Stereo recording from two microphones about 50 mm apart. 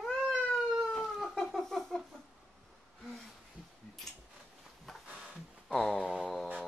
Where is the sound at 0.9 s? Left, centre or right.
Centre.